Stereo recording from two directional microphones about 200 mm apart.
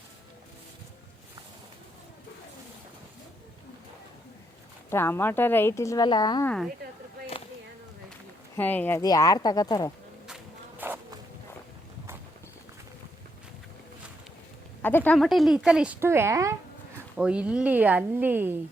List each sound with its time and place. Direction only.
4.9 s speech: 10° left (ahead or behind)
8.5 s speech: 10° left (ahead or behind)
10.2 s insect: 5° right (ahead or behind)
14.8 s a woman's voice: 10° left (ahead or behind); by 18.6 s 10° right (ahead or behind)